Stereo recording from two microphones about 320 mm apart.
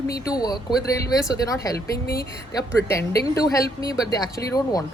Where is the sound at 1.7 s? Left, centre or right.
Left.